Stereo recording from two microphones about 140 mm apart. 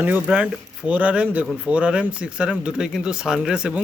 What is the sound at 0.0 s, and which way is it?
Speech, 10° right (ahead or behind).